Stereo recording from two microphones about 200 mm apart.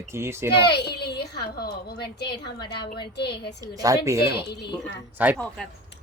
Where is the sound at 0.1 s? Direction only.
15° right (ahead or behind).